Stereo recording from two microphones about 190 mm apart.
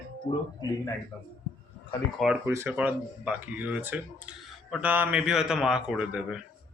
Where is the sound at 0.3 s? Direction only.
25° left (ahead or behind).